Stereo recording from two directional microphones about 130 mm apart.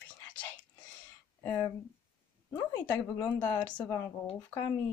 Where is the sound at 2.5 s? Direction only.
15° left (ahead or behind).